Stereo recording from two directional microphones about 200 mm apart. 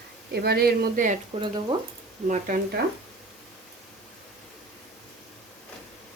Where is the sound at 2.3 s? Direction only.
40° right (ahead or behind).